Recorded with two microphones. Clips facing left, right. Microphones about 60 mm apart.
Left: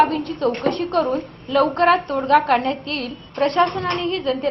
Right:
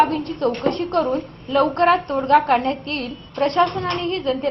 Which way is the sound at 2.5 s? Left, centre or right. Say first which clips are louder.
Even; left.